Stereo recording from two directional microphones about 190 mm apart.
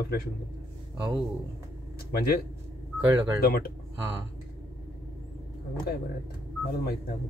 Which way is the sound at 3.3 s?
55° left (ahead or behind).